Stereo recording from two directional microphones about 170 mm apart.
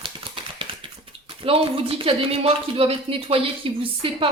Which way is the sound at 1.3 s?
30° right (ahead or behind).